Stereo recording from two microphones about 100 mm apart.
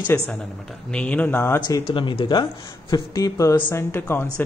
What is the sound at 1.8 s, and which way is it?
Speech, 55° left (ahead or behind).